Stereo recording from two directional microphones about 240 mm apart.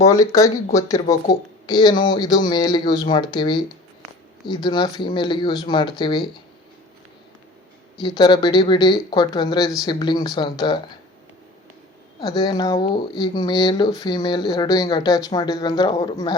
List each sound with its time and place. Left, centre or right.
0.0 s speech: centre
8.0 s speech: centre
12.2 s speech: centre